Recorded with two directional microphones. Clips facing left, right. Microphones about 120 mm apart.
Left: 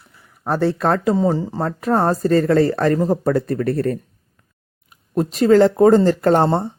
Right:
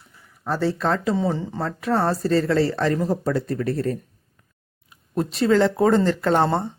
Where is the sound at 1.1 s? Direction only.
40° left (ahead or behind).